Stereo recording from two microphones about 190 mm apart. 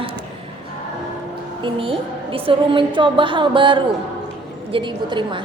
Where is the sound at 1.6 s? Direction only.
30° right (ahead or behind).